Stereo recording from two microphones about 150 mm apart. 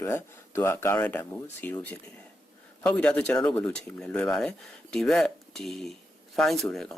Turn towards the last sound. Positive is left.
turn(degrees=0)  # may be behind; listen again after turning